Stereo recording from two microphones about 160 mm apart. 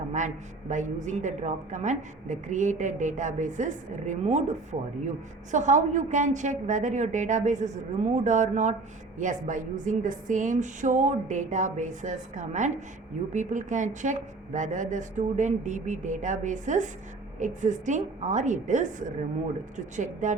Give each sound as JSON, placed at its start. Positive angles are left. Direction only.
{"t": 0.7, "sound": "a woman's voice", "side_deg": -50}